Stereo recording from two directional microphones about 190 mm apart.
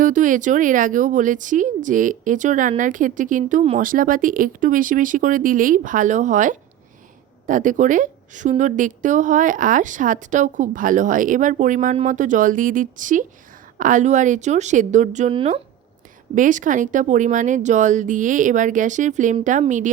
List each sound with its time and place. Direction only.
0.0 s a woman's voice: 45° right (ahead or behind)
16.3 s speech: 45° right (ahead or behind)